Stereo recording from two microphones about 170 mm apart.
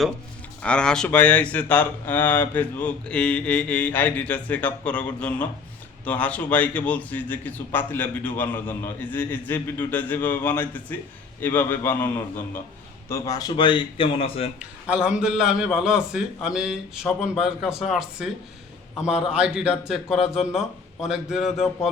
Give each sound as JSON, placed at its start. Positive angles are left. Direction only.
{"t": 0.6, "sound": "a man's voice", "side_deg": 5}
{"t": 14.6, "sound": "a man's voice", "side_deg": -5}